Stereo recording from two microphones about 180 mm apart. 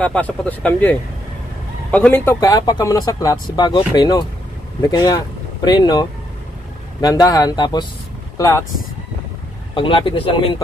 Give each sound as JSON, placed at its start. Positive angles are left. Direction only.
{"t": 0.0, "sound": "speech", "side_deg": 10}
{"t": 9.8, "sound": "speech", "side_deg": 30}